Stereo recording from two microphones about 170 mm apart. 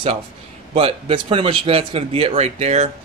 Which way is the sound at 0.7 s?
30° right (ahead or behind).